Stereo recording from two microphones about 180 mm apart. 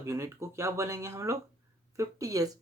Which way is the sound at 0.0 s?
15° right (ahead or behind).